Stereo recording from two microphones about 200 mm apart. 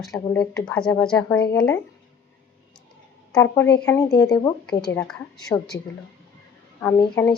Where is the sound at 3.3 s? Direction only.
10° left (ahead or behind).